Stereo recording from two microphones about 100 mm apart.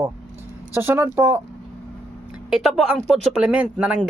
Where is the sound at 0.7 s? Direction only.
25° right (ahead or behind).